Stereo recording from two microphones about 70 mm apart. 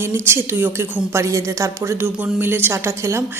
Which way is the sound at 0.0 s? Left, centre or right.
Right.